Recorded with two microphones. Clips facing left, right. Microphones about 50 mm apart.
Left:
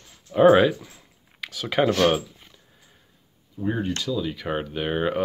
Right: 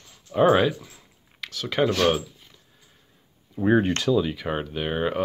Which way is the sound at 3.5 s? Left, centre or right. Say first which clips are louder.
Right 6 dB; right.